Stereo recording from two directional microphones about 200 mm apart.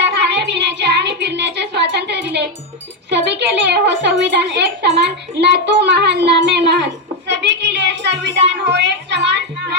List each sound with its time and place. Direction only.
0.0 s music: 60° right (ahead or behind)
3.1 s a child's voice: 60° right (ahead or behind)
8.7 s music: 60° right (ahead or behind)